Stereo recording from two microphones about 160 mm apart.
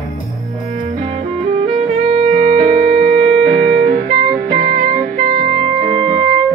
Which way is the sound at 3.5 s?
45° right (ahead or behind).